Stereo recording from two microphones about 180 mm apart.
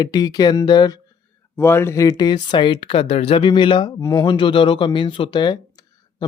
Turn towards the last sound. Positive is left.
turn(degrees=25)  # may be behind; listen again after turning